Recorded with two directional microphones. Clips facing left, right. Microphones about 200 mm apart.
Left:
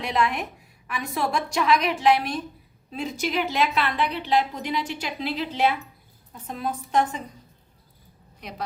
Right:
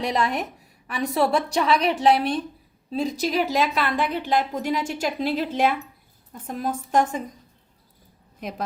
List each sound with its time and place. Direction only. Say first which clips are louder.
0.0 s a woman's voice: right 1 dB; 35° right (ahead or behind)